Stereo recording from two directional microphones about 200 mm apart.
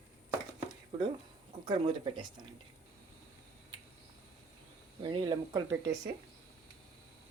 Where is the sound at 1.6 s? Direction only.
25° right (ahead or behind).